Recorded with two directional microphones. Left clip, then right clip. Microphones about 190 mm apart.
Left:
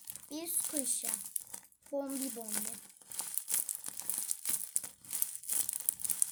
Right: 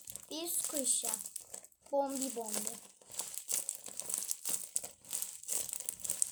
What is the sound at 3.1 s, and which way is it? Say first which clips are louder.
Crumpling: even; 20° left (ahead or behind).